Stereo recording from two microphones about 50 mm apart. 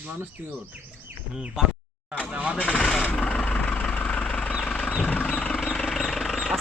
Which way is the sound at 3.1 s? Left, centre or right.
Centre.